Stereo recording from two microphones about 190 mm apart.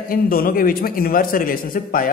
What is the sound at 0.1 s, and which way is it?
A man's voice, 50° left (ahead or behind).